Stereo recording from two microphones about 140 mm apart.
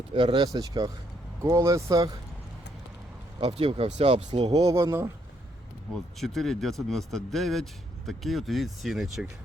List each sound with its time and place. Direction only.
0.1 s speech: 40° right (ahead or behind)
3.4 s speech: 40° right (ahead or behind)
4.6 s speech: 25° right (ahead or behind)
6.1 s speech: centre (ahead or behind)